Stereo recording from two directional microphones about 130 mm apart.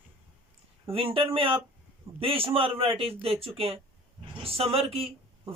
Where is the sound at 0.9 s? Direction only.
45° right (ahead or behind).